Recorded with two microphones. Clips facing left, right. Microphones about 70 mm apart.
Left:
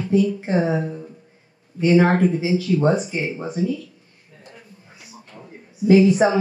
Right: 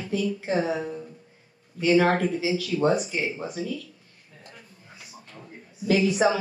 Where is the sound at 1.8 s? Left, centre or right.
Left.